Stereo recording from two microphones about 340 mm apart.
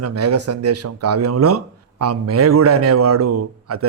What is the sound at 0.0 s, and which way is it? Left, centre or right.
A man's voice, right.